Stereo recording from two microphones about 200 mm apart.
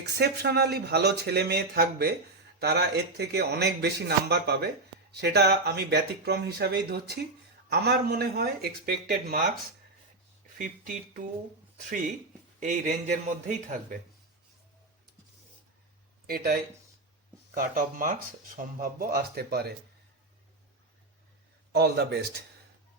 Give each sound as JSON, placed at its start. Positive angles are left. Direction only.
{"t": 0.2, "sound": "a man's voice", "side_deg": -50}
{"t": 10.6, "sound": "a man's voice", "side_deg": -45}
{"t": 16.2, "sound": "speech", "side_deg": -50}
{"t": 21.7, "sound": "speech", "side_deg": -55}